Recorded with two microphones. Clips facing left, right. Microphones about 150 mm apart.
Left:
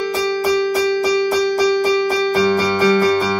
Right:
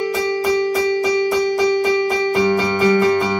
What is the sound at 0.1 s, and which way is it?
Music, 20° right (ahead or behind).